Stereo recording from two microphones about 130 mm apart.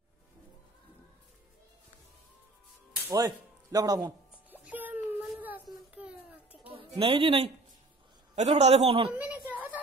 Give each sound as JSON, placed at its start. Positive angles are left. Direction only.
{"t": 3.1, "sound": "a man's voice", "side_deg": -25}
{"t": 4.5, "sound": "music", "side_deg": -15}
{"t": 5.4, "sound": "child singing", "side_deg": -10}
{"t": 7.0, "sound": "a man's voice", "side_deg": -40}
{"t": 8.4, "sound": "a man's voice", "side_deg": -60}
{"t": 9.1, "sound": "a sound", "side_deg": -15}